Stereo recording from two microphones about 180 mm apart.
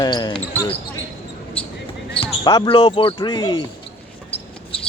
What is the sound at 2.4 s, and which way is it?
Speech, 25° left (ahead or behind).